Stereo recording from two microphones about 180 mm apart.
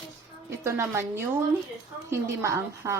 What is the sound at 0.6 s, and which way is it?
A woman's voice, 15° right (ahead or behind).